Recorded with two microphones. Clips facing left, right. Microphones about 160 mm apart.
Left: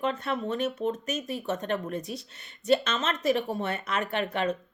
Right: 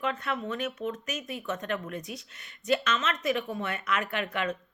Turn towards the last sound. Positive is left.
turn(degrees=30)  # may be behind; listen again after turning